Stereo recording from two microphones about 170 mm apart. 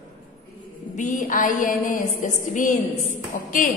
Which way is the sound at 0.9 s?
50° left (ahead or behind).